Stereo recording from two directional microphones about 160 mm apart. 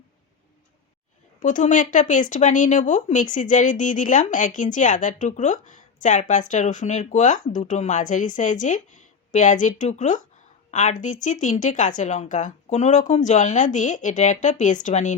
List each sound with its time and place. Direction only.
1.4 s speech: 55° left (ahead or behind)